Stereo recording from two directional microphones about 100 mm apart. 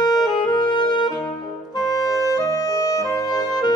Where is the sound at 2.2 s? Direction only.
35° left (ahead or behind).